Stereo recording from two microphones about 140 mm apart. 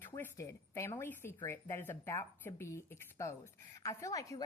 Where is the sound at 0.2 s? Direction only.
20° left (ahead or behind).